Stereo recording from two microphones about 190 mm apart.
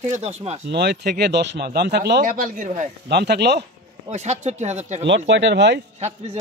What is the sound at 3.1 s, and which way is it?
Speech, 60° right (ahead or behind).